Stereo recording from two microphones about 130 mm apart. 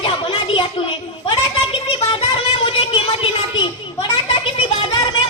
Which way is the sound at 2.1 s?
40° left (ahead or behind).